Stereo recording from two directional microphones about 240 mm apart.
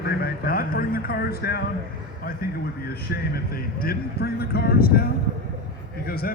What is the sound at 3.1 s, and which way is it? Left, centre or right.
A man's voice, left.